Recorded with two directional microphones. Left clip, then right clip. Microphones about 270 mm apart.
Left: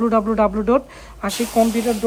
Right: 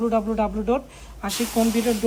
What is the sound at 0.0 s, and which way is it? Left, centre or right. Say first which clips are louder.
Speech: left 5 dB; left.